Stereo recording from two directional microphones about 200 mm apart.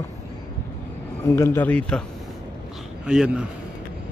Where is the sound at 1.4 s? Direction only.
10° left (ahead or behind).